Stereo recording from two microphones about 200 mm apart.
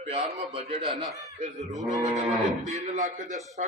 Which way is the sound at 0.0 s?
30° right (ahead or behind).